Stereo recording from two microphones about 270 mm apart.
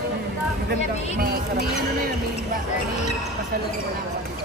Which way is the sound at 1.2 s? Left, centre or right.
Right.